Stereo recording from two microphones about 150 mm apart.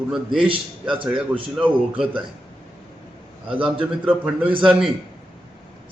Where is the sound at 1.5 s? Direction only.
5° right (ahead or behind).